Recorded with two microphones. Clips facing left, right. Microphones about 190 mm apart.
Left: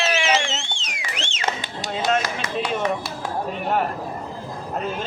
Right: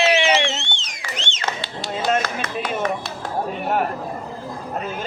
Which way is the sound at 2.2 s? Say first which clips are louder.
Even; 10° left (ahead or behind).